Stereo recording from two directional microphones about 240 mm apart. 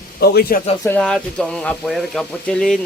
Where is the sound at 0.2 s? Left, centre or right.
Left.